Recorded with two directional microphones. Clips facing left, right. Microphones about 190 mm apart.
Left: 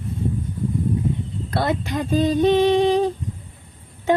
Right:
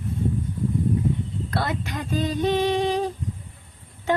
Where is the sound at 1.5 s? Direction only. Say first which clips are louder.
Left 6 dB; 25° left (ahead or behind).